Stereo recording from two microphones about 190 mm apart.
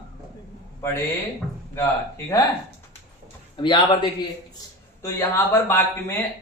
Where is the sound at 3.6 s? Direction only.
25° left (ahead or behind).